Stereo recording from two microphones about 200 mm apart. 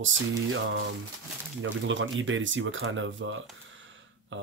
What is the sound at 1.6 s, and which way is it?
Speech, 70° right (ahead or behind).